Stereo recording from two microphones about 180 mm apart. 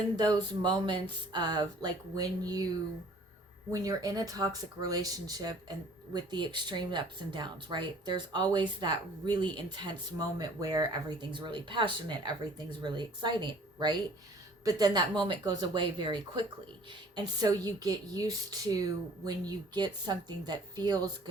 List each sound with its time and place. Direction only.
0.2 s speech: 25° right (ahead or behind)
3.7 s speech: 20° right (ahead or behind)